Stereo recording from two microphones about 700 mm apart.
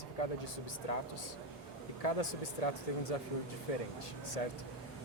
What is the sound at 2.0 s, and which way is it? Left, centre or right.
Speech, left.